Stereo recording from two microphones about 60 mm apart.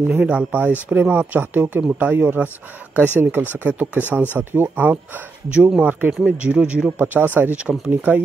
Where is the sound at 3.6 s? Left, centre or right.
Right.